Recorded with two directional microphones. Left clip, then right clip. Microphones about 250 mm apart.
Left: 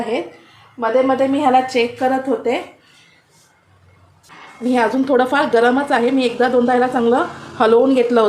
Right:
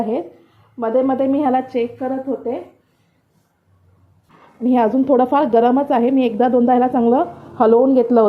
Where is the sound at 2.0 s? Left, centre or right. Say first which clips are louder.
Left 5 dB; centre.